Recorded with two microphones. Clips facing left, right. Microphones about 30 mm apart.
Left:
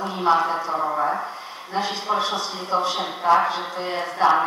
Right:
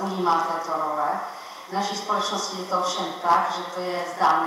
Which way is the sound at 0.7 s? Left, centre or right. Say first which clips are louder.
Left 2 dB; centre.